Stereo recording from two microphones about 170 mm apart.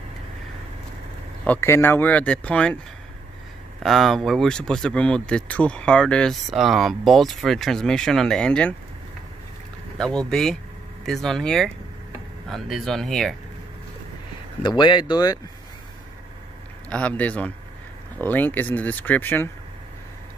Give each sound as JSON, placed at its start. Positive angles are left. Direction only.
{"t": 1.4, "sound": "speech", "side_deg": 10}
{"t": 3.8, "sound": "speech", "side_deg": 0}
{"t": 9.9, "sound": "speech", "side_deg": 5}
{"t": 14.6, "sound": "speech", "side_deg": 25}
{"t": 16.9, "sound": "speech", "side_deg": 5}